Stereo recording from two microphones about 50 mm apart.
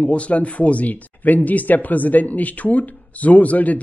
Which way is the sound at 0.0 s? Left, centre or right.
Left.